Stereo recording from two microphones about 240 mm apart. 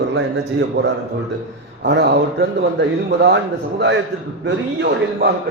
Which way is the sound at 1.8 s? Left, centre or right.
Right.